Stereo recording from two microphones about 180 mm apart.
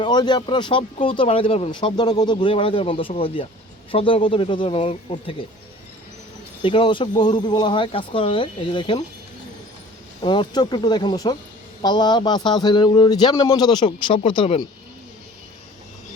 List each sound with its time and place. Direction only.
0.0 s speech: 25° left (ahead or behind)
6.6 s speech: 30° left (ahead or behind)
10.2 s speech: 25° left (ahead or behind)